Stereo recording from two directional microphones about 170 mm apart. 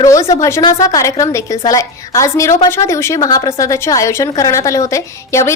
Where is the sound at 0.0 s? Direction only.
20° left (ahead or behind).